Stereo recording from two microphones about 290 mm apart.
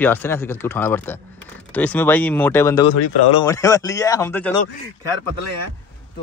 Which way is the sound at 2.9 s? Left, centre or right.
Left.